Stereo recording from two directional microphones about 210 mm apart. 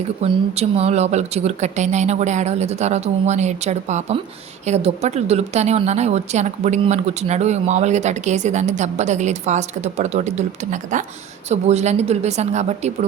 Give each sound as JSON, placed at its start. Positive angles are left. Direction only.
{"t": 0.2, "sound": "a woman's voice", "side_deg": -30}